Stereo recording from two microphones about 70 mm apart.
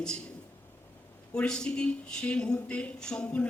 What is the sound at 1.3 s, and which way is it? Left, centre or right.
A man's voice, centre.